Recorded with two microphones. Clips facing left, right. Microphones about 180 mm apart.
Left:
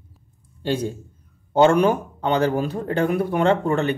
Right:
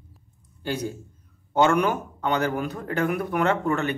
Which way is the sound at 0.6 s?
30° left (ahead or behind).